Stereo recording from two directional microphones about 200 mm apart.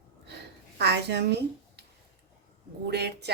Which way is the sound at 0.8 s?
55° right (ahead or behind).